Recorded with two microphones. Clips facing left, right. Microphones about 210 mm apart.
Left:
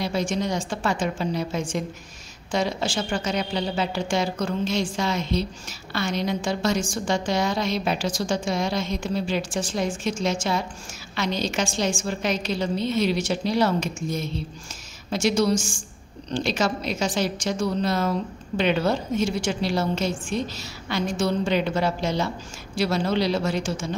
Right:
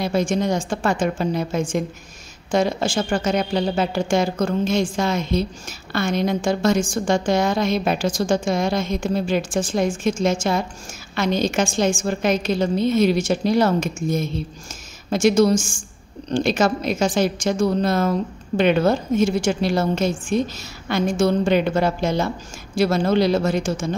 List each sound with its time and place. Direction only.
0.0 s a woman's voice: 50° right (ahead or behind)